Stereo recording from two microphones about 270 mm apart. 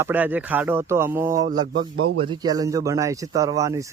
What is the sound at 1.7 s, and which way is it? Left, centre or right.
Speech, right.